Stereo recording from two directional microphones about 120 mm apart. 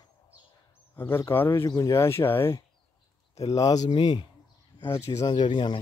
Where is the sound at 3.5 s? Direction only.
30° left (ahead or behind).